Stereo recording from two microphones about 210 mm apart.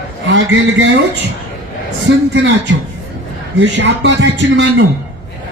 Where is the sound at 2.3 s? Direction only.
60° right (ahead or behind).